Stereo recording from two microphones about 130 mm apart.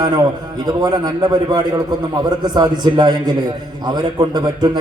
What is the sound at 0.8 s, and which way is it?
A man's voice, 30° right (ahead or behind).